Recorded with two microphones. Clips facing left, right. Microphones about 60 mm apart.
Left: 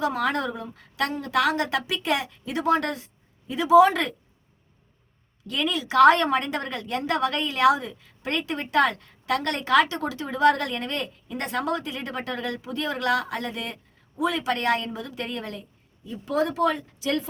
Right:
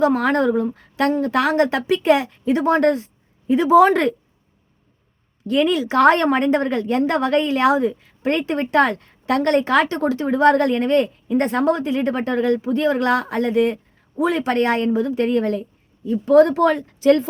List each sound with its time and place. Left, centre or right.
0.0 s a woman's voice: right
5.5 s a woman's voice: right
16.2 s speech: right